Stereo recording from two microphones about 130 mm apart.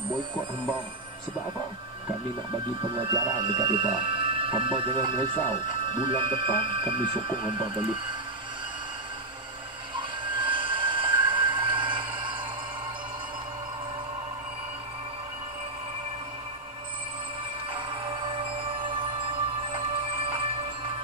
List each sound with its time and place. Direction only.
2.8 s speech: 40° right (ahead or behind)
9.9 s a sound: 40° right (ahead or behind)
17.7 s music: 40° right (ahead or behind)